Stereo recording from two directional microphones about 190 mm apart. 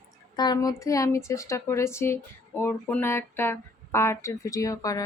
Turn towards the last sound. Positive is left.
turn(degrees=20)  # may be behind; listen again after turning